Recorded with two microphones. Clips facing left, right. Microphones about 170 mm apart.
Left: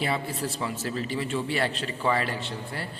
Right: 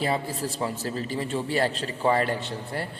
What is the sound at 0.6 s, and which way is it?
A man's voice, 40° right (ahead or behind).